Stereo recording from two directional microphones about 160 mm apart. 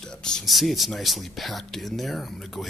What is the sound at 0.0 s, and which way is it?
Speech, 5° left (ahead or behind).